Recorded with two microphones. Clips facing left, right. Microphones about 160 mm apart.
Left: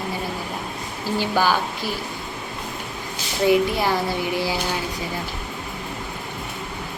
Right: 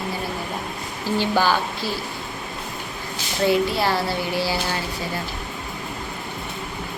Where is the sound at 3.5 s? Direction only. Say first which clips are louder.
Left 2 dB; 15° left (ahead or behind).